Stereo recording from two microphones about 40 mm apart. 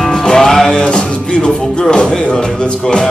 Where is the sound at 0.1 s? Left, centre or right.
Centre.